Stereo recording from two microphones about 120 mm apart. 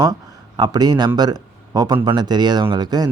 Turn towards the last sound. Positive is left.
turn(degrees=-35)  # may be behind; listen again after turning